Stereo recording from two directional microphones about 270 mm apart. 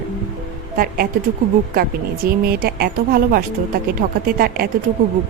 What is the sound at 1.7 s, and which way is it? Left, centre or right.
A woman's voice, right.